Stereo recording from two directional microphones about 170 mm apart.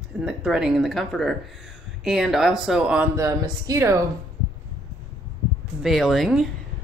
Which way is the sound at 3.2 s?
20° right (ahead or behind).